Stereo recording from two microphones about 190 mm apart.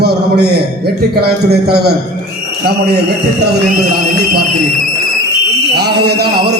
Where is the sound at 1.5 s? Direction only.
55° right (ahead or behind).